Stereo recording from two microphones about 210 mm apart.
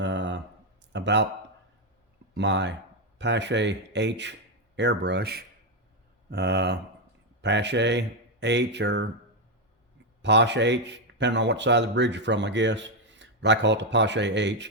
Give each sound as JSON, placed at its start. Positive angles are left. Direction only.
{"t": 0.0, "sound": "a sound", "side_deg": -60}
{"t": 0.9, "sound": "speech", "side_deg": -55}
{"t": 2.3, "sound": "speech", "side_deg": -55}
{"t": 10.2, "sound": "speech", "side_deg": -55}